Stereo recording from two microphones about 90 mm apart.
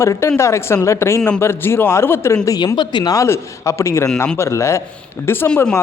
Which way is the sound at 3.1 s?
35° left (ahead or behind).